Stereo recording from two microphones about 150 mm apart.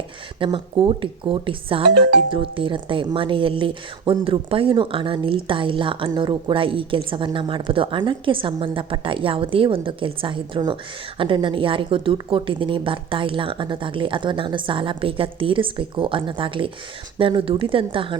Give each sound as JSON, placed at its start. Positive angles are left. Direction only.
{"t": 0.3, "sound": "speech", "side_deg": -35}